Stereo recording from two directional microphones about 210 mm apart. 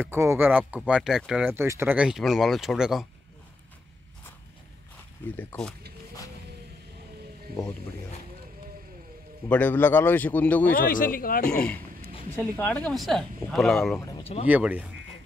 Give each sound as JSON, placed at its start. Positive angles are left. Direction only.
{"t": 0.0, "sound": "speech", "side_deg": -10}
{"t": 5.3, "sound": "a man's voice", "side_deg": 10}
{"t": 9.5, "sound": "a man's voice", "side_deg": 5}
{"t": 10.7, "sound": "a man's voice", "side_deg": 40}
{"t": 11.4, "sound": "speech", "side_deg": 5}
{"t": 13.9, "sound": "speech", "side_deg": 20}
{"t": 14.5, "sound": "speech", "side_deg": -5}